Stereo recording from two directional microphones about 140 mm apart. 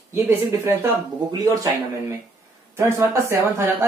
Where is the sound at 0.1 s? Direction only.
15° right (ahead or behind).